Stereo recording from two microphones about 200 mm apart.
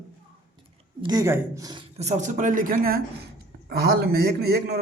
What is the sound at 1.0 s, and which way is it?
Speech, 15° right (ahead or behind).